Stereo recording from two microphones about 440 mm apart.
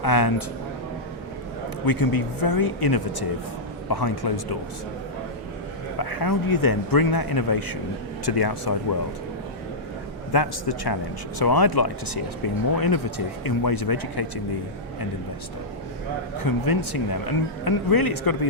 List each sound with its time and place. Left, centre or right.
0.0 s speech: left
1.8 s speech: left
6.0 s speech: left
10.3 s speech: left
16.4 s speech: left